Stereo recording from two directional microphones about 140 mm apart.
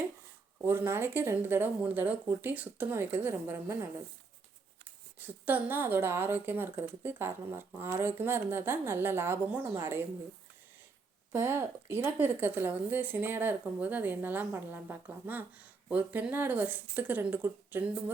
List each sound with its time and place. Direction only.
0.6 s speech: 15° right (ahead or behind)
5.2 s speech: 15° right (ahead or behind)
11.3 s speech: 15° right (ahead or behind)